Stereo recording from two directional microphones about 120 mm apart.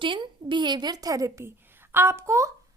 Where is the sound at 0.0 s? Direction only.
45° right (ahead or behind).